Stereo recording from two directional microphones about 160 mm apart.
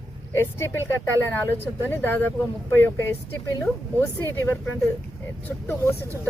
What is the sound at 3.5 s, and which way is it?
Speech, 15° left (ahead or behind).